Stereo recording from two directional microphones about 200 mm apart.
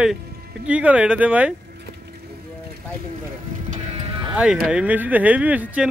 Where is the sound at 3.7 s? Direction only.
30° right (ahead or behind).